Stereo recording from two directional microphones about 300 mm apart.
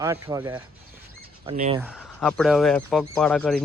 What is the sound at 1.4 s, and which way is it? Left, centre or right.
Speech, right.